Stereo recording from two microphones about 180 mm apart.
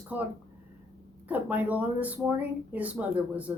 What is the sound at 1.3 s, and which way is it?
Speech, 10° right (ahead or behind).